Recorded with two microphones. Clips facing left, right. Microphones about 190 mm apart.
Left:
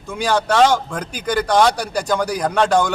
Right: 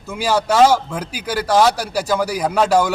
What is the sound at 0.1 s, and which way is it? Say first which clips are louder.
A man's voice: right 1 dB; 5° right (ahead or behind).